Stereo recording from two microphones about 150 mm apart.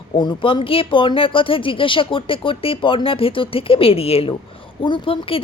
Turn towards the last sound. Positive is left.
turn(degrees=35)  # may be behind; listen again after turning